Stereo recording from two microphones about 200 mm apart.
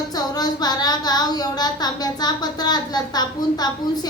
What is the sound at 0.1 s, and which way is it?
Speech, 20° left (ahead or behind).